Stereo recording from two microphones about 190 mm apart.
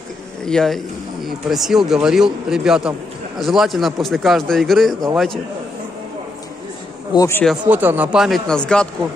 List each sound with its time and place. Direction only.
0.4 s speech: 5° left (ahead or behind)
7.1 s a man's voice: 15° left (ahead or behind)
7.7 s speech: 10° right (ahead or behind)